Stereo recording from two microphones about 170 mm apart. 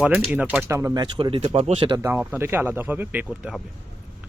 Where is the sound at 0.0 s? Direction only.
5° right (ahead or behind).